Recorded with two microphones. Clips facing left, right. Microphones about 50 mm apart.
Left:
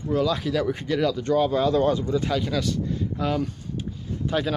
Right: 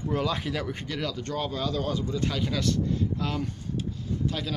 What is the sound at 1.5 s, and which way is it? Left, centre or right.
Speech, left.